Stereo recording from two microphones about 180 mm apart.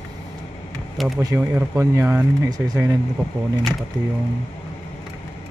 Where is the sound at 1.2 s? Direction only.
20° right (ahead or behind).